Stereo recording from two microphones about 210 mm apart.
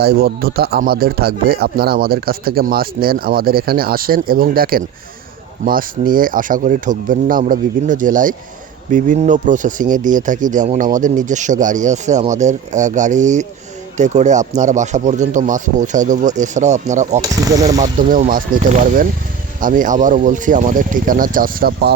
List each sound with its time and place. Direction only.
0.0 s a man's voice: 50° right (ahead or behind)
17.2 s speech: 15° right (ahead or behind)
17.7 s a man's voice: 35° right (ahead or behind)